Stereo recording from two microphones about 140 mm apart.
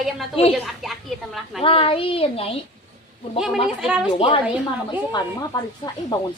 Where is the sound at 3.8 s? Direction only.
5° right (ahead or behind).